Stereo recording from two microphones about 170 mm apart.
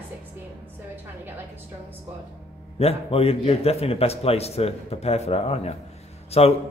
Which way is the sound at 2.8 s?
35° left (ahead or behind).